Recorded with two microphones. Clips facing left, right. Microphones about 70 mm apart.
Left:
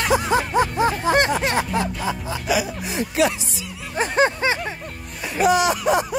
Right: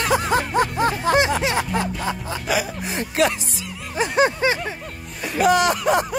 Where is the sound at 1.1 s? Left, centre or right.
Right.